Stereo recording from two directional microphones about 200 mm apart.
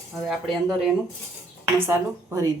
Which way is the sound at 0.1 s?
Centre (ahead or behind).